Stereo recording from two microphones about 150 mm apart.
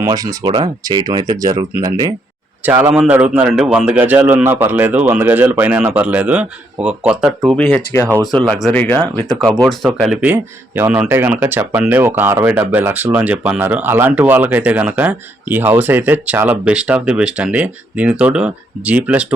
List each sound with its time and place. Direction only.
0.0 s speech: 25° right (ahead or behind)
2.9 s speech: 10° right (ahead or behind)
7.5 s speech: 5° left (ahead or behind)
8.0 s speech: 15° right (ahead or behind)
8.4 s speech: centre (ahead or behind)
8.7 s speech: 10° left (ahead or behind)
9.6 s speech: centre (ahead or behind)